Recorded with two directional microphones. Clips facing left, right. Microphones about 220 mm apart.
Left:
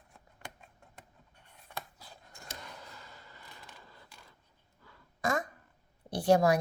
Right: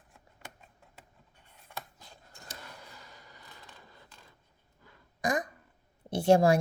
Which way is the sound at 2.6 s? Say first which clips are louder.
Left 1 dB; 10° right (ahead or behind).